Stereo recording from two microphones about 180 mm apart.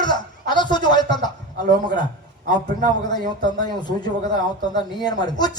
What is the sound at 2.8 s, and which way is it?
A man's voice, 25° left (ahead or behind).